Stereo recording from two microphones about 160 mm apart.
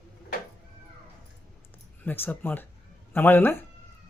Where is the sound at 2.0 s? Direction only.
10° left (ahead or behind).